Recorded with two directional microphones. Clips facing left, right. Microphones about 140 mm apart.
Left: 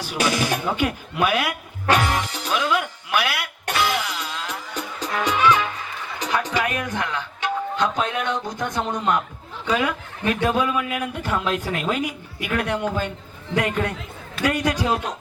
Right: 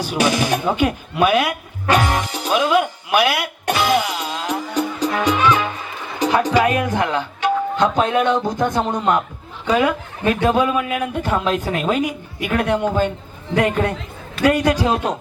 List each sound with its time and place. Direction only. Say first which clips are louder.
0.0 s speech: right 4 dB; 20° right (ahead or behind)
2.0 s music: right 3 dB; 20° right (ahead or behind)
7.8 s speech: right 7 dB; 30° right (ahead or behind)